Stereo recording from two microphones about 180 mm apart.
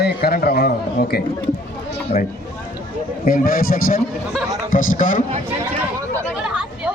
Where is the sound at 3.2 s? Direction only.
55° left (ahead or behind).